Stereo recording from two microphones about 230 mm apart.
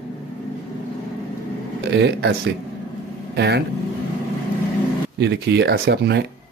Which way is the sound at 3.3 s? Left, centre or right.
Right.